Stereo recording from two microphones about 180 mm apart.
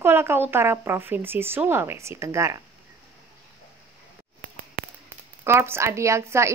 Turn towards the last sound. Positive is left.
turn(degrees=-15)  # may be behind; listen again after turning